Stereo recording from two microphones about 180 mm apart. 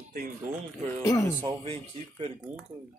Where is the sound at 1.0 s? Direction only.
15° left (ahead or behind).